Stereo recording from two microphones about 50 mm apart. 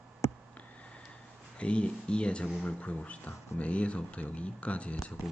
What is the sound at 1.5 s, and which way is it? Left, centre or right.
Speech, left.